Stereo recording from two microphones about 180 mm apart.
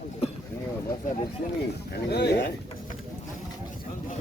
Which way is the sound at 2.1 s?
70° left (ahead or behind).